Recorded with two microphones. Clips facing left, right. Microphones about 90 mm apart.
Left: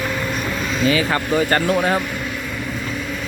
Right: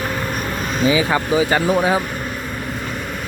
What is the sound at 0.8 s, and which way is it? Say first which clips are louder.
Speech: right 2 dB; 15° right (ahead or behind).